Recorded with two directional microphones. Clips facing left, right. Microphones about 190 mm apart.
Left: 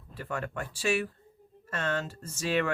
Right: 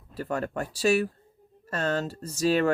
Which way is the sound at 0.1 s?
40° right (ahead or behind).